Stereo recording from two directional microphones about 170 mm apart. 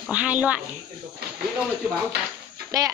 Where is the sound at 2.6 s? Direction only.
20° right (ahead or behind).